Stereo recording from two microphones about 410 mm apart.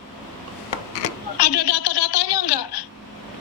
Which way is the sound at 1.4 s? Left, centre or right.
Left.